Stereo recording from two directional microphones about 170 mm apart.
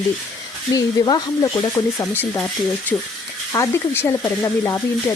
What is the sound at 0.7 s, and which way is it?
Speech, 20° left (ahead or behind).